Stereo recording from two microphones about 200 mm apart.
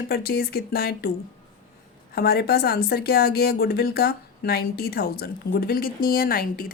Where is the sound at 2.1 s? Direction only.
50° left (ahead or behind).